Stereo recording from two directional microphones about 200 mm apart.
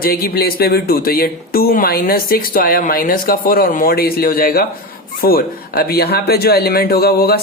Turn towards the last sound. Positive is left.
turn(degrees=50)  # may be behind; listen again after turning